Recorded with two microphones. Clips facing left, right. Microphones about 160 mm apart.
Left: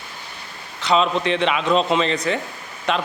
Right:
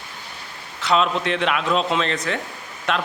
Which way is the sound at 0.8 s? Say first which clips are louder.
Left 1 dB; centre (ahead or behind).